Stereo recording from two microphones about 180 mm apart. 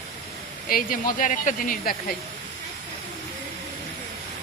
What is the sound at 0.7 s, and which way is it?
Speech, 50° left (ahead or behind).